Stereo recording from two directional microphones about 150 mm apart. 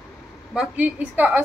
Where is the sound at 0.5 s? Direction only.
10° right (ahead or behind).